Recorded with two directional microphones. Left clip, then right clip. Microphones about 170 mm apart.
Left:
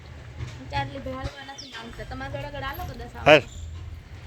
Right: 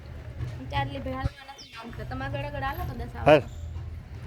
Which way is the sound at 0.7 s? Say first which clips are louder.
Left 1 dB; 30° right (ahead or behind).